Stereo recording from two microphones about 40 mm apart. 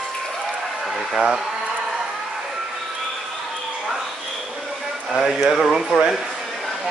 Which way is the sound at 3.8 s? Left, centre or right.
Centre.